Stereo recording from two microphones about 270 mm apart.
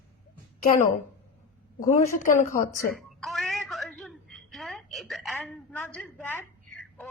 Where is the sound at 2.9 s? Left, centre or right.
Centre.